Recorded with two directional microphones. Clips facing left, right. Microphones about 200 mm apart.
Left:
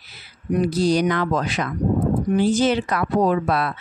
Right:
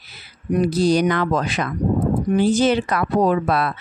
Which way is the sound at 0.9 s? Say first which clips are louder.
Right 2 dB; 60° right (ahead or behind).